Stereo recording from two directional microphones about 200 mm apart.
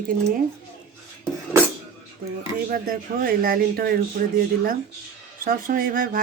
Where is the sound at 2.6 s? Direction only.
45° right (ahead or behind).